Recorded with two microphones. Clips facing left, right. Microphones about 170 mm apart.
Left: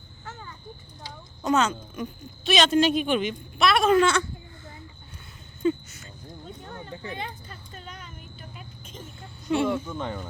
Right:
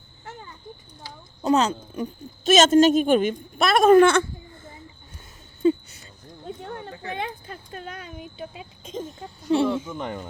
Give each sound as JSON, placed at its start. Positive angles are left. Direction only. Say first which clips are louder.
{"t": 0.3, "sound": "a sound", "louder": "right 1 dB", "side_deg": -25}
{"t": 1.4, "sound": "a woman's voice", "louder": "right 3 dB", "side_deg": -35}
{"t": 5.6, "sound": "a sound", "louder": "right 4 dB", "side_deg": -35}
{"t": 7.2, "sound": "speech", "louder": "right 5 dB", "side_deg": -60}
{"t": 8.4, "sound": "speech", "louder": "right 7 dB", "side_deg": -90}
{"t": 9.1, "sound": "speech", "louder": "right 3 dB", "side_deg": -35}
{"t": 9.8, "sound": "speech", "louder": "right 1 dB", "side_deg": -10}